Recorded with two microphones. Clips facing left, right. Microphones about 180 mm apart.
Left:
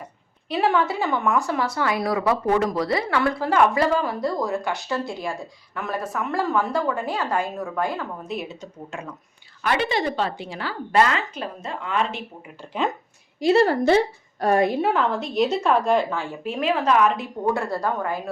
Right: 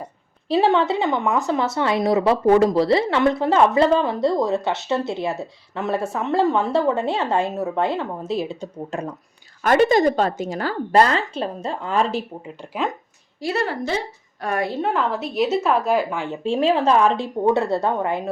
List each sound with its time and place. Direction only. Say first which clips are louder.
0.4 s speech: right 4 dB; 30° right (ahead or behind)
13.4 s a woman's voice: left 7 dB; 25° left (ahead or behind)
14.4 s a woman's voice: left 5 dB; 40° left (ahead or behind)
14.8 s a woman's voice: even; centre (ahead or behind)
16.1 s speech: right 5 dB; 20° right (ahead or behind)